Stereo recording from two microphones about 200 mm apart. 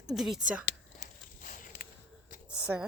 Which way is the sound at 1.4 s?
45° left (ahead or behind).